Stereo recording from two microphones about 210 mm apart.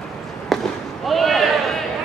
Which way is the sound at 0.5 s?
Centre (ahead or behind).